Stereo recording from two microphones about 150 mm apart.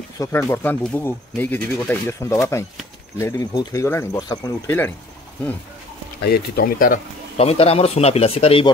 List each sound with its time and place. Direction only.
0.2 s speech: 20° left (ahead or behind)
4.6 s speech: 15° left (ahead or behind)
6.2 s speech: 90° left; by 7.0 s 70° left (ahead or behind)
7.3 s speech: 40° left (ahead or behind)